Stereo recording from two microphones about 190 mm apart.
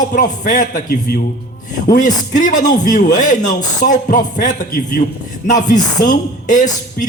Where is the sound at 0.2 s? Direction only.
45° left (ahead or behind).